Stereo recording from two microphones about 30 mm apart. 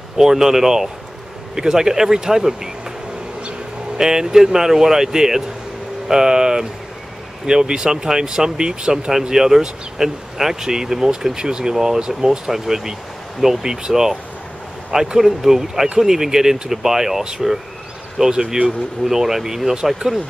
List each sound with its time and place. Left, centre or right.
0.2 s speech: centre
4.0 s speech: right
9.3 s speech: centre
15.1 s speech: centre